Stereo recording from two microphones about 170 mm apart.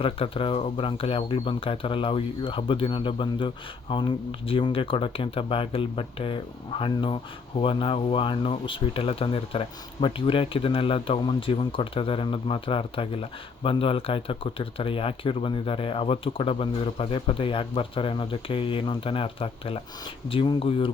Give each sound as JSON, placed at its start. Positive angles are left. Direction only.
{"t": 0.0, "sound": "speech", "side_deg": 30}